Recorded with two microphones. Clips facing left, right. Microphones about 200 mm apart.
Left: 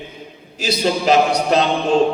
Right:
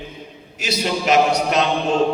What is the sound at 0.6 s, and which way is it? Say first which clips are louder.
A man's voice: left 4 dB; 35° left (ahead or behind).